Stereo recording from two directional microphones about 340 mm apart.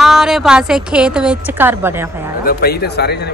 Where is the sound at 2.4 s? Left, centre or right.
Left.